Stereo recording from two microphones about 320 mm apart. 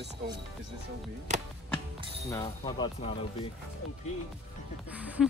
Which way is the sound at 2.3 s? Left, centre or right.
Centre.